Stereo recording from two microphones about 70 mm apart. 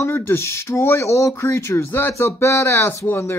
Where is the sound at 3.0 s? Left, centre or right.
Left.